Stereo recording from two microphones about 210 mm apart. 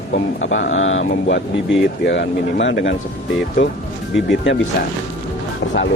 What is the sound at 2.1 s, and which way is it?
Speech, 60° left (ahead or behind).